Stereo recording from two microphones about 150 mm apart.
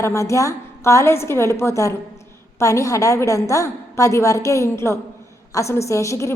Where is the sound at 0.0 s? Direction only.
20° left (ahead or behind).